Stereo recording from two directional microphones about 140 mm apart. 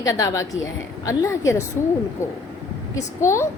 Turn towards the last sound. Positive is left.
turn(degrees=20)  # may be behind; listen again after turning